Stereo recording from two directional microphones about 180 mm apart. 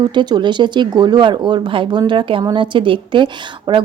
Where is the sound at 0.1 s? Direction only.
25° right (ahead or behind).